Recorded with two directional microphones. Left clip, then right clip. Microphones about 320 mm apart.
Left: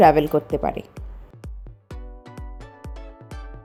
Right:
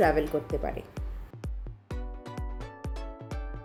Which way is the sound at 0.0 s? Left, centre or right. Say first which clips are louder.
Left 10 dB; left.